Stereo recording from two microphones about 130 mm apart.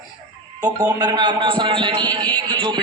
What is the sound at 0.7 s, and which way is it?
A man's voice, 30° right (ahead or behind).